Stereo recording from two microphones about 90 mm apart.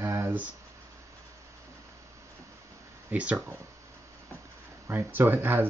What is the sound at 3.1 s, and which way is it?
Speech, 15° right (ahead or behind).